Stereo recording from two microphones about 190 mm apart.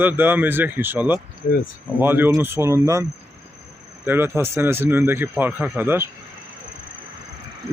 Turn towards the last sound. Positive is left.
turn(degrees=-10)  # may be behind; listen again after turning